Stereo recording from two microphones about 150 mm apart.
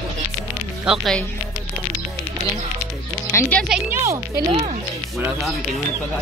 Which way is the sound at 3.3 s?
15° left (ahead or behind).